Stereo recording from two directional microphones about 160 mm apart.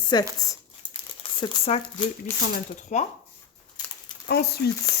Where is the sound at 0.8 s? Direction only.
30° right (ahead or behind).